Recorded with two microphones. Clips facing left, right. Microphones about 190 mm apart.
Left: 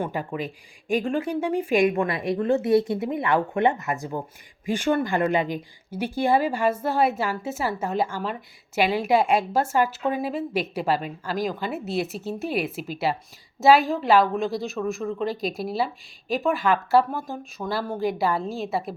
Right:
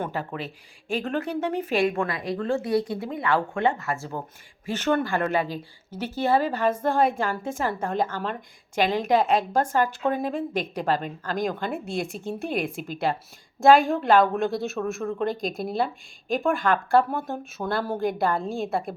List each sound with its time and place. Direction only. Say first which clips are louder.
0.0 s a woman's voice: left 2 dB; 15° left (ahead or behind)